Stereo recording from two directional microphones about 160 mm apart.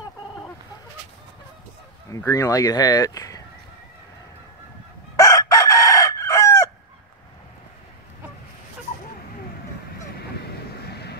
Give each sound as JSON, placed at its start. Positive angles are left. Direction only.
{"t": 2.0, "sound": "speech", "side_deg": 20}
{"t": 5.1, "sound": "chicken", "side_deg": 20}
{"t": 10.3, "sound": "waves", "side_deg": 90}